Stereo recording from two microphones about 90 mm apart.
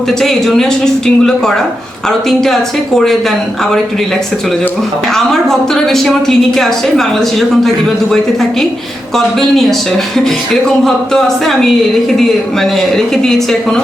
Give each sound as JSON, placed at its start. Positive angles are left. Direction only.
{"t": 0.1, "sound": "a woman's voice", "side_deg": 5}
{"t": 5.1, "sound": "a woman's voice", "side_deg": 5}